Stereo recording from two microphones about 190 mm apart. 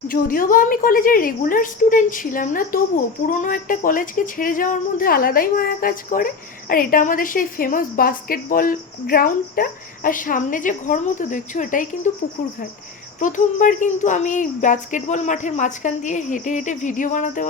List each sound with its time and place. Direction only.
0.1 s speech: 45° left (ahead or behind)
13.1 s speech: 45° left (ahead or behind)